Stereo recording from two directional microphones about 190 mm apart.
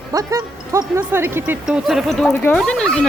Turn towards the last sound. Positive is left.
turn(degrees=5)  # may be behind; listen again after turning